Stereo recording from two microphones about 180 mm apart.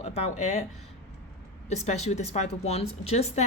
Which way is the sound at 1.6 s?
40° left (ahead or behind).